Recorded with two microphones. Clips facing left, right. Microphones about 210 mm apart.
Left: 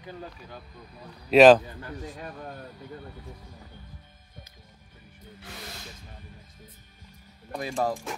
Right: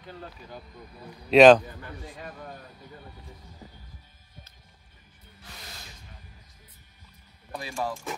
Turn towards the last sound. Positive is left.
turn(degrees=45)  # may be behind; listen again after turning